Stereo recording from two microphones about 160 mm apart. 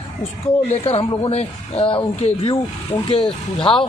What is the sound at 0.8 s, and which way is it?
Speech, 35° left (ahead or behind).